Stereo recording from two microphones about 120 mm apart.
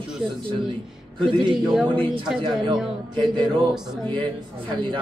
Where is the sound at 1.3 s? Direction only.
40° right (ahead or behind).